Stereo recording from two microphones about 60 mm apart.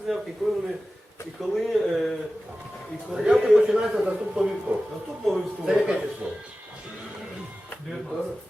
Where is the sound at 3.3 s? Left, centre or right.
Centre.